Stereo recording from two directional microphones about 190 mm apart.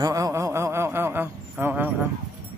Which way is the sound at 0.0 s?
20° right (ahead or behind).